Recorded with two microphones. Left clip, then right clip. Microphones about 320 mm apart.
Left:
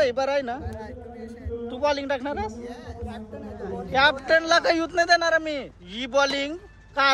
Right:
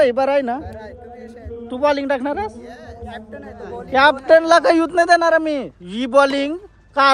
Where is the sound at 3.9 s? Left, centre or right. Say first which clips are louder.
Right 8 dB; centre.